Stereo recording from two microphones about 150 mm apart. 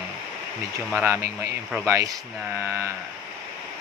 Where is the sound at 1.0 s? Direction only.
15° right (ahead or behind).